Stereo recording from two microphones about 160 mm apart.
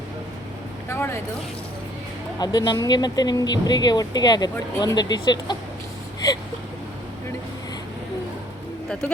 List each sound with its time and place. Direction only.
0.9 s vehicle: 15° left (ahead or behind)
2.4 s speech: 25° left (ahead or behind)
8.9 s speech: 5° left (ahead or behind)